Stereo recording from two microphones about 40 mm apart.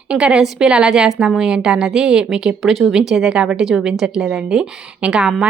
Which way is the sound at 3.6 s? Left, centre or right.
Centre.